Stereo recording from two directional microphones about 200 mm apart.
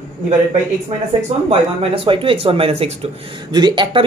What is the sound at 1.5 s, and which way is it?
Speech, 30° right (ahead or behind).